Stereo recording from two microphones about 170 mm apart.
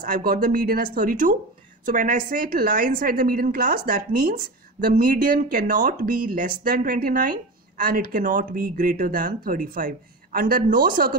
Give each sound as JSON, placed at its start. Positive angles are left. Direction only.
{"t": 0.0, "sound": "a woman's voice", "side_deg": -55}